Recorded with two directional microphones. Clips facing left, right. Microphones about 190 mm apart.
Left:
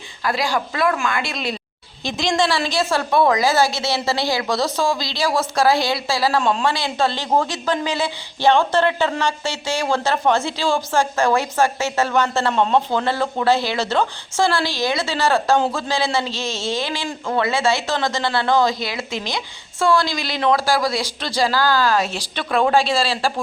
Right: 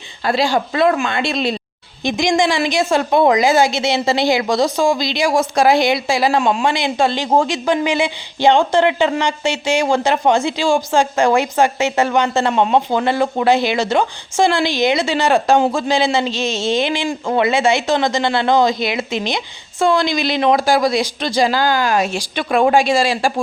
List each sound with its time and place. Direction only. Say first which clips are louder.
0.2 s speech: right 5 dB; 25° right (ahead or behind)
2.0 s speech: right 4 dB; 15° right (ahead or behind)